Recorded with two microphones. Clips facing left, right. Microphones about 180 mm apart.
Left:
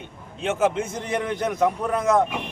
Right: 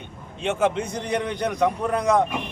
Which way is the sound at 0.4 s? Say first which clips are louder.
Even; 5° left (ahead or behind).